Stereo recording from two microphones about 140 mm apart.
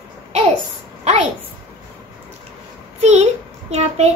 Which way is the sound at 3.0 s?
50° right (ahead or behind).